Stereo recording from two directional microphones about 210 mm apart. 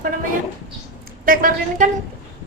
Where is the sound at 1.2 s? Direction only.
40° right (ahead or behind).